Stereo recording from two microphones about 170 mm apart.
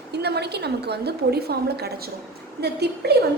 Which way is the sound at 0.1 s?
75° right (ahead or behind).